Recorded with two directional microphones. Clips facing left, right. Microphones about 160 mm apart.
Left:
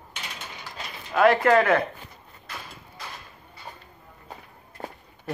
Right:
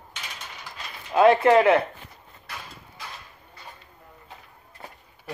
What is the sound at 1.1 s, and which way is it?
Speech, 25° right (ahead or behind).